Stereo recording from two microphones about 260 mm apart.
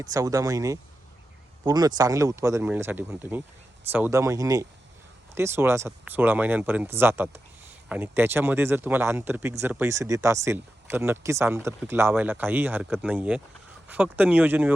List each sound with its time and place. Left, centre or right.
0.0 s speech: centre